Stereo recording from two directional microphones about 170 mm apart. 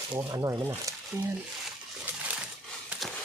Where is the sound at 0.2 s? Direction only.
20° right (ahead or behind).